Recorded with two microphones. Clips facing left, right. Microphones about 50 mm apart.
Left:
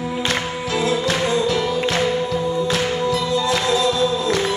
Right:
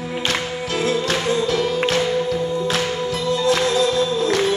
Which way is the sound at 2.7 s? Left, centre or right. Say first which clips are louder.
Left 2 dB; right.